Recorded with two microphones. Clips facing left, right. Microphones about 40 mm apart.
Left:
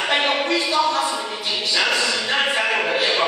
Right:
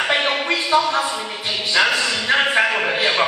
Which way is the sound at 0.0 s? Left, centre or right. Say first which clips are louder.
Right 1 dB; centre.